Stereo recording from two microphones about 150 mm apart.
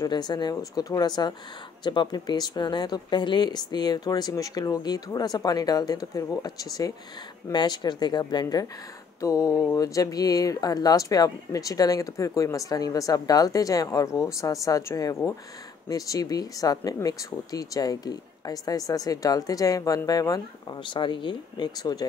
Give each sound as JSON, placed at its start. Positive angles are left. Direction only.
{"t": 0.0, "sound": "speech", "side_deg": 30}